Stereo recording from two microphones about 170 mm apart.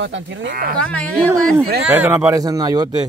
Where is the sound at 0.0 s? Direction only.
90° right.